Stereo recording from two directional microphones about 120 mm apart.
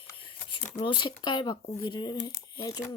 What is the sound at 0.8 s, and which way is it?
Speech, 45° left (ahead or behind).